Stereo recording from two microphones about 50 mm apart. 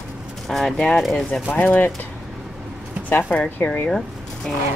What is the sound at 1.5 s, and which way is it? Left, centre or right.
Speech, left.